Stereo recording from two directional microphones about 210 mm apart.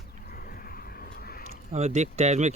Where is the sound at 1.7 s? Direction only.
30° right (ahead or behind).